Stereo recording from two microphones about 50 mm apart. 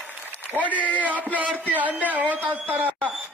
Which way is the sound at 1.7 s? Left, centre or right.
Right.